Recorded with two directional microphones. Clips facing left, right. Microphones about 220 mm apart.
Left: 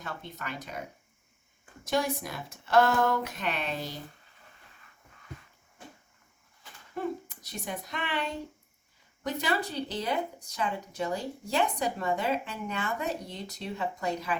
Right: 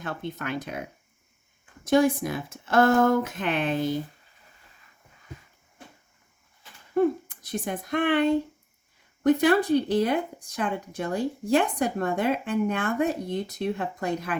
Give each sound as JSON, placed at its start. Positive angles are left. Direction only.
{"t": 0.0, "sound": "speech", "side_deg": -55}
{"t": 1.8, "sound": "speech", "side_deg": -50}
{"t": 6.9, "sound": "speech", "side_deg": -50}